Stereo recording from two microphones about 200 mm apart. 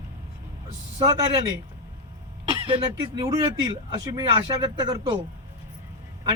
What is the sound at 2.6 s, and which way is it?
A man's voice, 25° right (ahead or behind).